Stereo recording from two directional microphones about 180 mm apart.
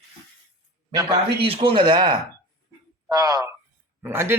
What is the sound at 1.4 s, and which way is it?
Speech, 30° right (ahead or behind).